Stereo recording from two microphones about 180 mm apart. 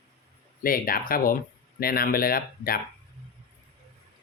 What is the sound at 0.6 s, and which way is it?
Speech, 50° left (ahead or behind).